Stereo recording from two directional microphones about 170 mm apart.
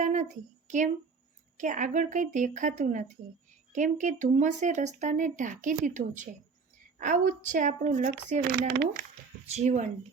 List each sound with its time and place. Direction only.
0.0 s a sound: 45° right (ahead or behind)
1.5 s speech: 50° right (ahead or behind); by 9.0 s 65° right (ahead or behind)
9.5 s speech: 45° right (ahead or behind)